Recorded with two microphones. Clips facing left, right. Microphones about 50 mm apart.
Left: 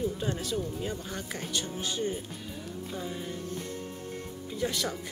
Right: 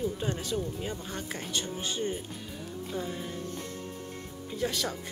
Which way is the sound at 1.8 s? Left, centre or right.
Right.